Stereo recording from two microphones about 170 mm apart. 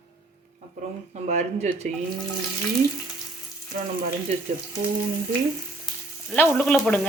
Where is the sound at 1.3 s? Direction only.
45° right (ahead or behind).